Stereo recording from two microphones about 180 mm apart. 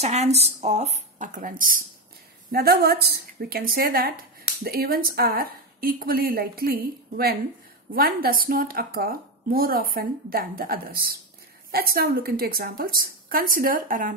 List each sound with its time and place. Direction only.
0.0 s speech: 40° right (ahead or behind)
2.5 s a woman's voice: 60° right (ahead or behind)